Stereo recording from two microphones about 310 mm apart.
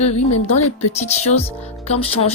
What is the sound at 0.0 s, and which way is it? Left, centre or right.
Speech, left.